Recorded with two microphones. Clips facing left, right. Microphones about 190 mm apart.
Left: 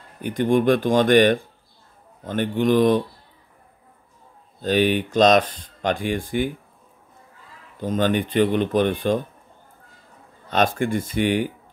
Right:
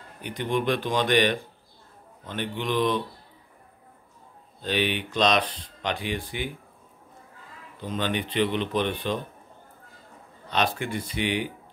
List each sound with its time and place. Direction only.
0.2 s speech: 45° left (ahead or behind)
4.6 s speech: 45° left (ahead or behind)
7.8 s speech: 45° left (ahead or behind)
10.5 s speech: 45° left (ahead or behind)